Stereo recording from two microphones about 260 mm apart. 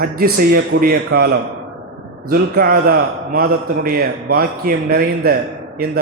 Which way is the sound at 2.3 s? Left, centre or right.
Right.